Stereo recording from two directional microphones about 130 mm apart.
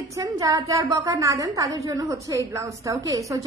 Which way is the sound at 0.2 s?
25° right (ahead or behind).